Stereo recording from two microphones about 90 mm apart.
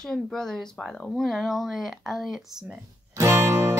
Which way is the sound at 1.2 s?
Centre (ahead or behind).